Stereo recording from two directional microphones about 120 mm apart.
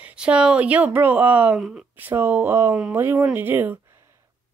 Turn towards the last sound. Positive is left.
turn(degrees=-15)  # may be behind; listen again after turning